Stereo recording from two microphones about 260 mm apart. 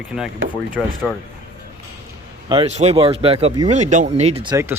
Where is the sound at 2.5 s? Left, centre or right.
Right.